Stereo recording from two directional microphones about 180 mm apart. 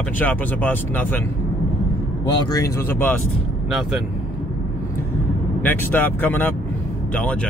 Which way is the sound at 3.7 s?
Centre (ahead or behind).